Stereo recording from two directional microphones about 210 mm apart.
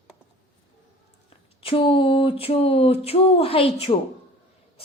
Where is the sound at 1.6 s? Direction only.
25° left (ahead or behind).